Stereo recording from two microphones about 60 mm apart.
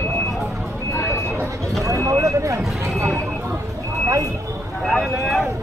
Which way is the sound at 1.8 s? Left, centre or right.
Right.